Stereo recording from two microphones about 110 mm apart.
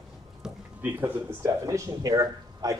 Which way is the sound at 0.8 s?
25° right (ahead or behind).